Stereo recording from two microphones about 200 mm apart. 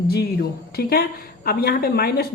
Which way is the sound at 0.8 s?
50° left (ahead or behind).